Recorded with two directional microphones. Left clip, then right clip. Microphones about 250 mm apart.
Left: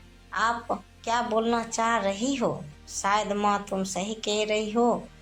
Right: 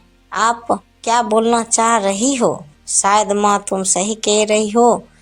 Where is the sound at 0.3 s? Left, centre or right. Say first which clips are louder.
Right 10 dB; right.